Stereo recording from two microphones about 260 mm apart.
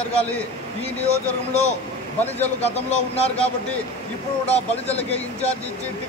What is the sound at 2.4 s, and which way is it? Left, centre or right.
Speech, left.